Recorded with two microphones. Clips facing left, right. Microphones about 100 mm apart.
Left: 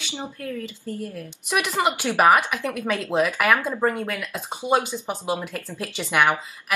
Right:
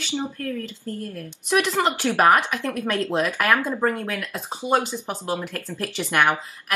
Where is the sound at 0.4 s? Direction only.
10° left (ahead or behind).